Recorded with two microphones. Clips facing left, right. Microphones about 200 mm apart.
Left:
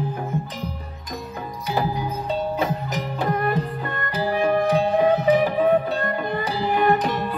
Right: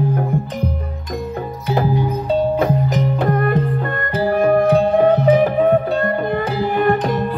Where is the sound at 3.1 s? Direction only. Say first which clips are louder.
Right 3 dB; 50° right (ahead or behind).